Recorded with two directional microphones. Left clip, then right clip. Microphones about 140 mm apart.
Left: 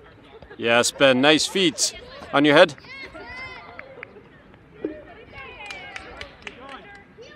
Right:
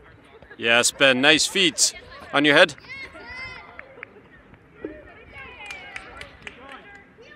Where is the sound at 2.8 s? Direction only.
40° right (ahead or behind).